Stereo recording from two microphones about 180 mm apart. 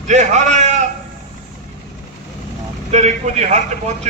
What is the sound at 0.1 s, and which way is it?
Speech, 40° right (ahead or behind).